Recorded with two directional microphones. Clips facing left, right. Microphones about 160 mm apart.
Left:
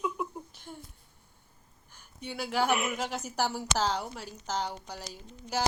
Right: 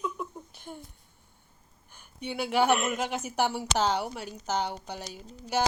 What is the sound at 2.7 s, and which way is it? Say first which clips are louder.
Speech: right 3 dB; 10° left (ahead or behind).